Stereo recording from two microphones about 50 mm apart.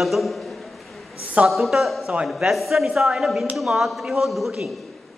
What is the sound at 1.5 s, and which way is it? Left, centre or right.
A man's voice, centre.